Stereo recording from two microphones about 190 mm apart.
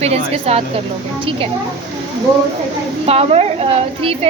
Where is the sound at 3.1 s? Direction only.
30° right (ahead or behind).